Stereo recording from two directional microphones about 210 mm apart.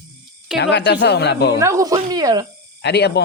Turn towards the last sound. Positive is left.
turn(degrees=50)  # may be behind; listen again after turning